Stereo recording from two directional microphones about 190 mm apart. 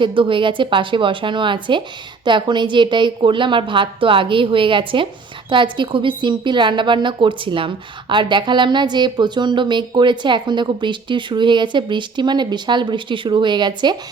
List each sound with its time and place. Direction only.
0.0 s a woman's voice: 25° right (ahead or behind)